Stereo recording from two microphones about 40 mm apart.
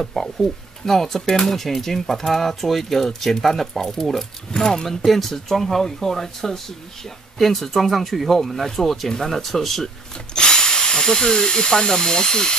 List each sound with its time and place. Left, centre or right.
0.0 s speech: centre
10.3 s speech: centre